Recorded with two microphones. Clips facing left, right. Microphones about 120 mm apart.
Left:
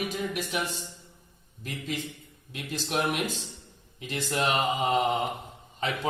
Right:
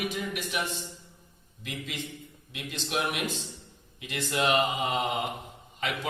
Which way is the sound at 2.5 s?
40° left (ahead or behind).